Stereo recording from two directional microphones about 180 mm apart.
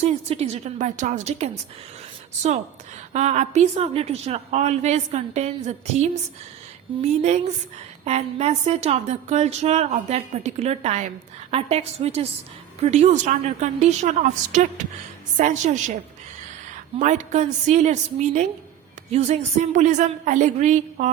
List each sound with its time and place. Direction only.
0.0 s speech: 35° right (ahead or behind)
3.1 s a woman's voice: 40° right (ahead or behind)
17.0 s speech: 40° right (ahead or behind)
19.1 s speech: 35° right (ahead or behind)